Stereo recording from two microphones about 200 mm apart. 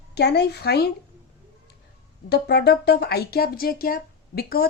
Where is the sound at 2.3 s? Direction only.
55° left (ahead or behind).